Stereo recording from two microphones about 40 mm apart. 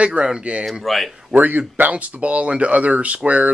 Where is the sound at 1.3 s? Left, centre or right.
Right.